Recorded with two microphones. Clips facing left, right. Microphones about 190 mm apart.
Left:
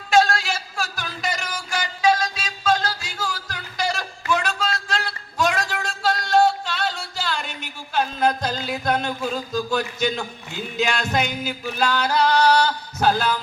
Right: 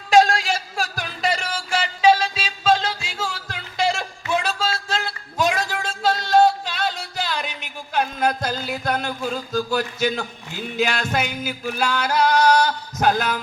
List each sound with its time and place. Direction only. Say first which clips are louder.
0.1 s music: right 3 dB; 35° right (ahead or behind); by 13.2 s 15° right (ahead or behind)